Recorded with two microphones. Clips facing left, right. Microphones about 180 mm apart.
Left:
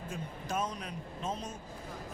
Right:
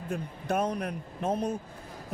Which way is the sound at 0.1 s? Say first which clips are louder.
Right 7 dB; 60° right (ahead or behind).